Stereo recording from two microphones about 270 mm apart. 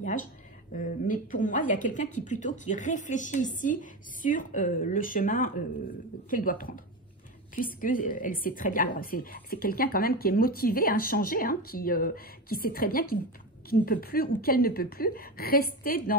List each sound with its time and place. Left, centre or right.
0.0 s a woman's voice: left